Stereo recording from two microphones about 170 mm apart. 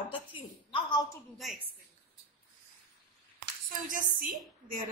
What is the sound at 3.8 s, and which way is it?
A woman's voice, 55° right (ahead or behind).